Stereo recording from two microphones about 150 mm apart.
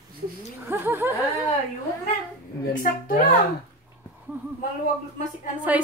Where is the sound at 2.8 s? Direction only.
65° left (ahead or behind).